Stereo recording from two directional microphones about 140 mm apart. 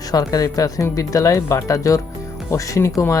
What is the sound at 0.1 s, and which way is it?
A woman's voice, 25° left (ahead or behind).